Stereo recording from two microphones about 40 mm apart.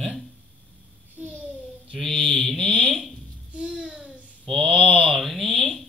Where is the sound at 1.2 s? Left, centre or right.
Right.